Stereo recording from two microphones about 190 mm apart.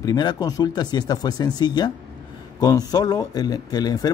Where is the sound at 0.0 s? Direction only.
20° left (ahead or behind).